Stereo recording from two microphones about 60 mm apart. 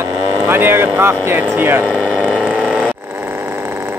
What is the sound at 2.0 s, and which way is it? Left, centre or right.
Vehicle, left.